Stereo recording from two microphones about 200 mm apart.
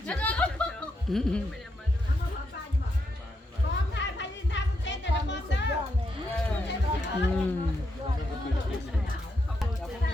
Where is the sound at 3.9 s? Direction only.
65° left (ahead or behind).